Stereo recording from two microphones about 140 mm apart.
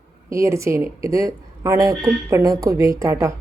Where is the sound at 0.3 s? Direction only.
20° right (ahead or behind).